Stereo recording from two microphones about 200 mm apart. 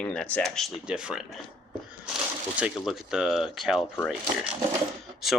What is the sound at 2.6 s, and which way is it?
Speech, 5° right (ahead or behind).